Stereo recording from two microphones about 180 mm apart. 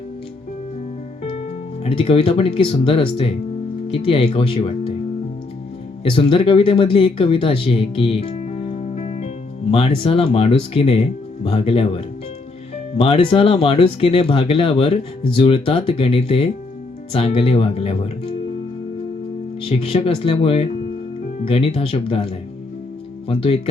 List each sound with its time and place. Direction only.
1.2 s speech: 35° left (ahead or behind)
6.0 s speech: 30° left (ahead or behind)
19.6 s speech: 35° left (ahead or behind)
23.3 s speech: 35° left (ahead or behind)